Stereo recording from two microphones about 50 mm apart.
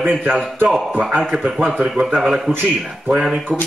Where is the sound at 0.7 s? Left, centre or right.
Centre.